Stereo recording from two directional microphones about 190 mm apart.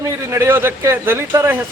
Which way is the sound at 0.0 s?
15° right (ahead or behind).